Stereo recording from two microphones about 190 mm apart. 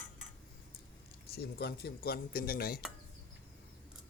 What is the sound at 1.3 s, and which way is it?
Speech, 55° left (ahead or behind).